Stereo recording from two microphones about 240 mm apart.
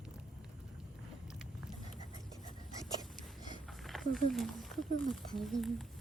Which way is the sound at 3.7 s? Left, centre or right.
Centre.